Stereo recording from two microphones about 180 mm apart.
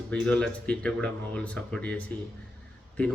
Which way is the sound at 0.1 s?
5° left (ahead or behind).